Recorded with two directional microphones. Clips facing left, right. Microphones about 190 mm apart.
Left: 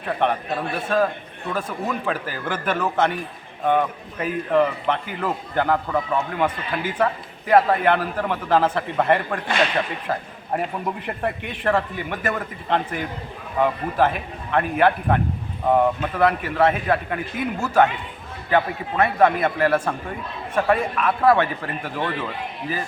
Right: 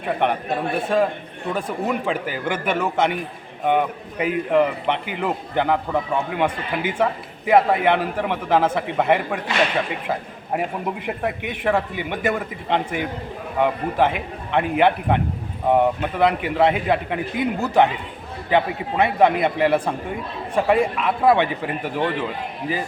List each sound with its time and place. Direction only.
0.2 s a man's voice: 15° right (ahead or behind)